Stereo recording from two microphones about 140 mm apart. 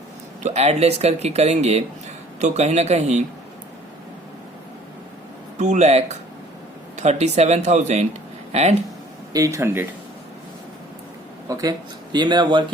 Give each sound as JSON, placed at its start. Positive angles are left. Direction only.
{"t": 0.4, "sound": "speech", "side_deg": -50}
{"t": 5.5, "sound": "speech", "side_deg": -55}
{"t": 9.3, "sound": "speech", "side_deg": -25}
{"t": 11.4, "sound": "speech", "side_deg": -25}